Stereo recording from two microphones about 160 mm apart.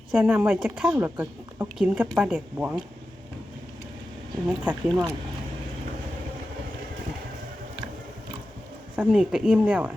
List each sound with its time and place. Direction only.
0.2 s speech: 10° right (ahead or behind)
4.4 s speech: 10° right (ahead or behind)
9.0 s speech: 5° right (ahead or behind)